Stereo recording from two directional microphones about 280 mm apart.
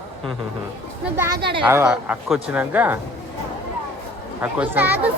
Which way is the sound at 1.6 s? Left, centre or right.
Centre.